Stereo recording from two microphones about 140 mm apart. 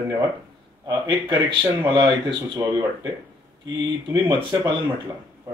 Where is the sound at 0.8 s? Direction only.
30° right (ahead or behind).